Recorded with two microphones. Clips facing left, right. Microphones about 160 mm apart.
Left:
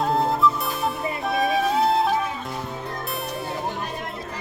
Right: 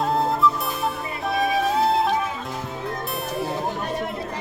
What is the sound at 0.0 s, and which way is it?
Music, centre (ahead or behind).